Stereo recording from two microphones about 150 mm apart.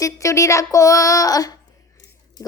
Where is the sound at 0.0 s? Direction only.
20° left (ahead or behind).